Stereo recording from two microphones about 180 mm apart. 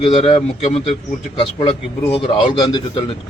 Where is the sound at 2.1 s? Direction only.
30° left (ahead or behind).